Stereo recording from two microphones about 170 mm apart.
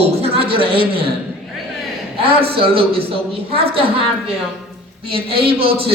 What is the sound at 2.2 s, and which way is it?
A man's voice, 35° right (ahead or behind).